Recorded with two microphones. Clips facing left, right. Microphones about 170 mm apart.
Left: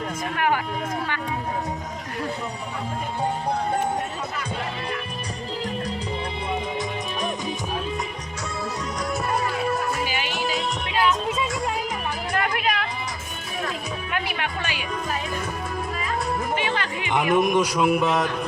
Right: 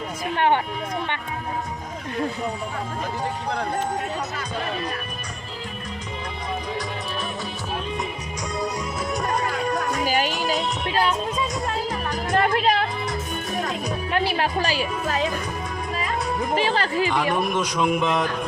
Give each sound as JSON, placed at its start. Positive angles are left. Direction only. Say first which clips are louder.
{"t": 0.3, "sound": "speech", "louder": "right 4 dB", "side_deg": -30}
{"t": 9.6, "sound": "music", "louder": "even", "side_deg": 5}
{"t": 10.0, "sound": "music", "louder": "right 5 dB", "side_deg": -45}
{"t": 12.3, "sound": "a sound", "louder": "right 6 dB", "side_deg": -30}
{"t": 13.7, "sound": "music", "louder": "right 3 dB", "side_deg": -30}
{"t": 16.6, "sound": "speech", "louder": "right 5 dB", "side_deg": -35}
{"t": 17.1, "sound": "speech", "louder": "left 3 dB", "side_deg": 20}